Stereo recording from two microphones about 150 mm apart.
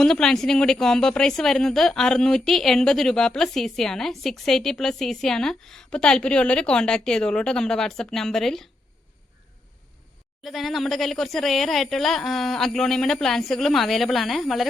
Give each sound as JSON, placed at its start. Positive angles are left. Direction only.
{"t": 0.0, "sound": "a woman's voice", "side_deg": 5}
{"t": 10.4, "sound": "a woman's voice", "side_deg": 0}